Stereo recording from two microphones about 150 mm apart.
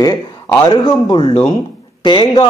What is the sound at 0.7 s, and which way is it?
Speech, 30° left (ahead or behind).